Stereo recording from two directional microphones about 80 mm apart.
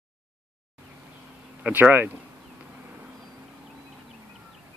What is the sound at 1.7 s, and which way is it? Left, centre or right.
Speech, right.